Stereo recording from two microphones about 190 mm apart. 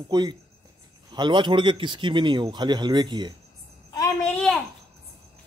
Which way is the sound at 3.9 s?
20° left (ahead or behind).